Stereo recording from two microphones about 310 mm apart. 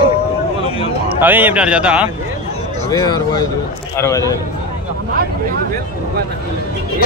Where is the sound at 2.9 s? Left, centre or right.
Centre.